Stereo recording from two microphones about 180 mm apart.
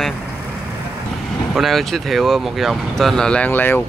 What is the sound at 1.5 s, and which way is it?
Speech, centre (ahead or behind).